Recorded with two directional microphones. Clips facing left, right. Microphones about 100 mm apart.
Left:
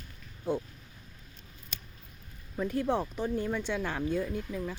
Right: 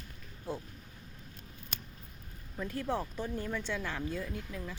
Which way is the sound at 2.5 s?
20° left (ahead or behind).